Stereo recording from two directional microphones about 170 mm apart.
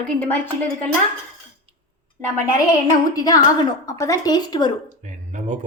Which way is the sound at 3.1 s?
20° left (ahead or behind).